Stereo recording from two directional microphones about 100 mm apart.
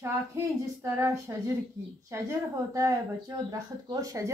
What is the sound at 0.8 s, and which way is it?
Speech, 30° right (ahead or behind).